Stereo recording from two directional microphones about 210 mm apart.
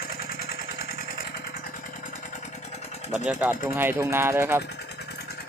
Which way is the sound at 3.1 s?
5° right (ahead or behind).